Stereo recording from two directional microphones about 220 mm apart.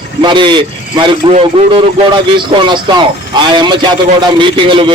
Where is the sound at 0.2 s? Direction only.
20° right (ahead or behind).